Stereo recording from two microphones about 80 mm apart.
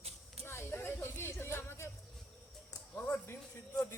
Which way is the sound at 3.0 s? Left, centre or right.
Left.